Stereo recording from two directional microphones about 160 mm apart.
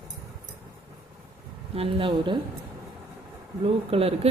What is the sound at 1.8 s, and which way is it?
Speech, 35° right (ahead or behind).